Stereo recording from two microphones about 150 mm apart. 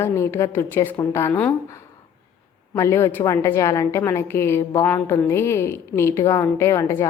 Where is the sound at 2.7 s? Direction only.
20° left (ahead or behind).